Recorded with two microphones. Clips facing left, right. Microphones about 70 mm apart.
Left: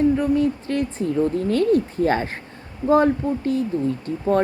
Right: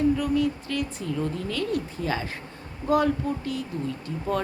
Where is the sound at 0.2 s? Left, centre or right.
Left.